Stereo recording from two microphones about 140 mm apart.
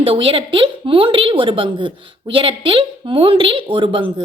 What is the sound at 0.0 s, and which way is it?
A woman's voice, 40° right (ahead or behind).